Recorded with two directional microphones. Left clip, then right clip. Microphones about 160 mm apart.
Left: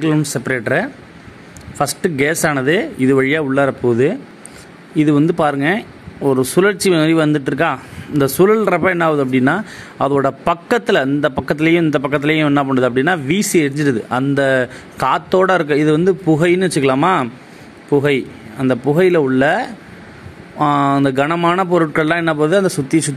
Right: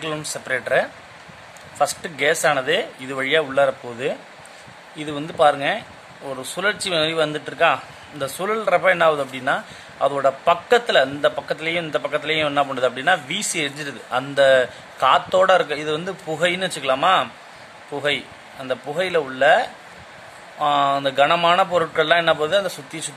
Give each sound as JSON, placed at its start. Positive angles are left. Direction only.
{"t": 0.0, "sound": "a man's voice", "side_deg": 25}